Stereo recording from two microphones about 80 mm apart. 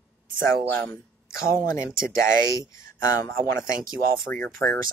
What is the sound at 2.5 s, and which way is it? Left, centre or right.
Speech, left.